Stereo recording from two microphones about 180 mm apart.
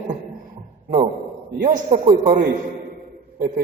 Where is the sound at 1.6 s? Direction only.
40° right (ahead or behind).